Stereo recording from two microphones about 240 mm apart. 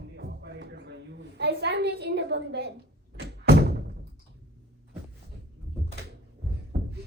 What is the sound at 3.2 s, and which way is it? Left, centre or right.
Door, right.